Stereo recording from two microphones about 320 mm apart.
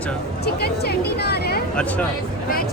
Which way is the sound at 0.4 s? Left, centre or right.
Left.